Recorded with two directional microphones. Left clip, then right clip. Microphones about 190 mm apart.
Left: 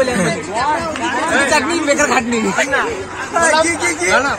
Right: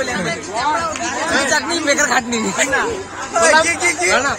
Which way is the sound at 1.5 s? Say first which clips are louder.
Left 2 dB; centre (ahead or behind).